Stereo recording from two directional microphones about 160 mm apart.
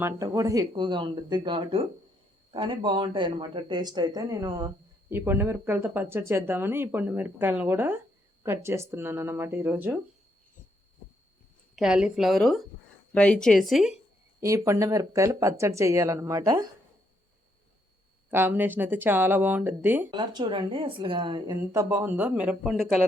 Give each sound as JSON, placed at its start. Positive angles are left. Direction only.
{"t": 0.0, "sound": "speech", "side_deg": -20}
{"t": 5.1, "sound": "speech", "side_deg": -15}
{"t": 11.8, "sound": "a woman's voice", "side_deg": -5}
{"t": 14.4, "sound": "speech", "side_deg": -20}
{"t": 18.3, "sound": "speech", "side_deg": -15}
{"t": 20.1, "sound": "speech", "side_deg": -30}